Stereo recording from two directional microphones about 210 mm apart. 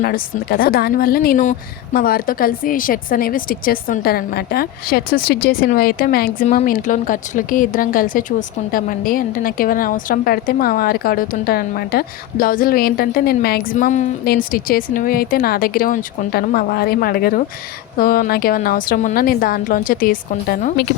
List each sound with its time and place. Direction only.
0.0 s a woman's voice: 45° left (ahead or behind)